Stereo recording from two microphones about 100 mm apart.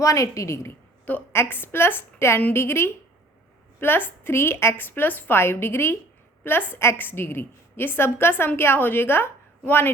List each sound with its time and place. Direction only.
0.0 s a woman's voice: 30° left (ahead or behind)